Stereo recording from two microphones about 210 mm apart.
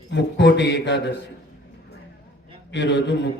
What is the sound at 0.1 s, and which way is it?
A man's voice, 55° left (ahead or behind).